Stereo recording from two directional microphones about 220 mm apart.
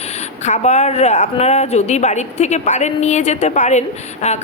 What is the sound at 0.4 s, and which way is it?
A woman's voice, 30° left (ahead or behind).